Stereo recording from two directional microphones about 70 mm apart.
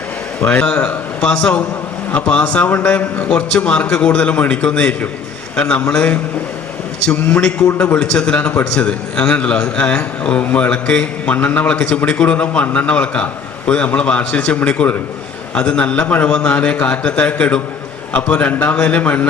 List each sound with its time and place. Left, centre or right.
0.4 s a man's voice: centre
7.9 s a man's voice: centre